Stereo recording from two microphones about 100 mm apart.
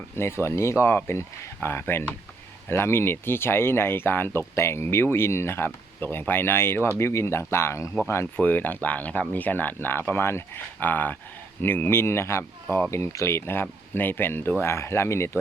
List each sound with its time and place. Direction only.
0.2 s speech: 25° left (ahead or behind)